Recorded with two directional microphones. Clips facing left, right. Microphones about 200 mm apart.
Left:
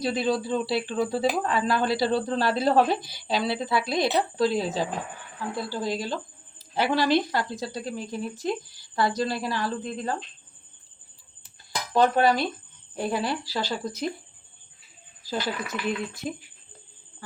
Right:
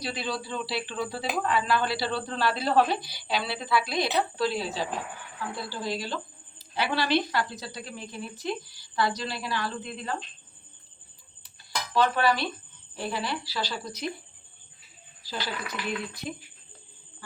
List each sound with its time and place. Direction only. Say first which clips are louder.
0.0 s a woman's voice: left 8 dB; 45° left (ahead or behind)
11.9 s speech: left 4 dB; 45° left (ahead or behind)
15.2 s speech: left 5 dB; 50° left (ahead or behind)